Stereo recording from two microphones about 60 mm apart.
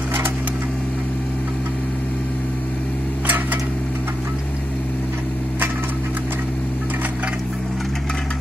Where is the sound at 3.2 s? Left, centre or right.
Right.